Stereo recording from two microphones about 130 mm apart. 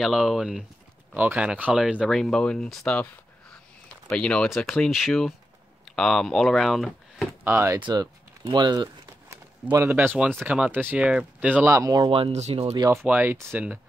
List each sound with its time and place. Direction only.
0.0 s speech: centre (ahead or behind)
4.1 s speech: 5° left (ahead or behind)
7.4 s speech: 20° right (ahead or behind)
7.8 s speech: 30° right (ahead or behind); by 11.8 s 15° right (ahead or behind)
11.8 s speech: 30° right (ahead or behind)
12.1 s speech: 50° right (ahead or behind)
12.7 s speech: 30° right (ahead or behind)
13.0 s speech: 15° right (ahead or behind)